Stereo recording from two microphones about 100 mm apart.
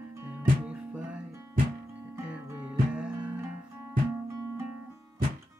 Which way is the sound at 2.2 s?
20° right (ahead or behind).